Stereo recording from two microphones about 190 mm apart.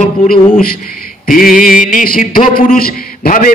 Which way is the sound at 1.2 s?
45° left (ahead or behind).